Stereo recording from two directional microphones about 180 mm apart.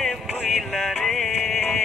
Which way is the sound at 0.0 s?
Centre (ahead or behind).